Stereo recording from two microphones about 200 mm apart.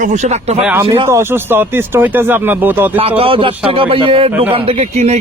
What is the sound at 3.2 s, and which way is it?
Speech, 25° right (ahead or behind).